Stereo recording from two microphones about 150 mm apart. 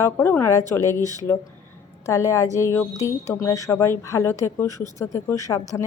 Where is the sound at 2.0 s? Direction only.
20° left (ahead or behind).